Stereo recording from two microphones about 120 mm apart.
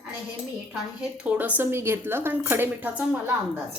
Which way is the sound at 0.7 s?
10° right (ahead or behind).